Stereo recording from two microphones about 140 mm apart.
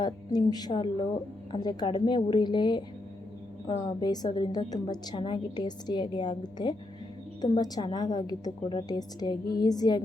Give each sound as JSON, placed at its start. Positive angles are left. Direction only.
{"t": 0.0, "sound": "a woman's voice", "side_deg": 30}